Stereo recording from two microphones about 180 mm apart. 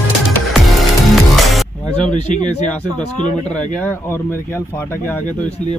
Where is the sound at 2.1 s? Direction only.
40° left (ahead or behind).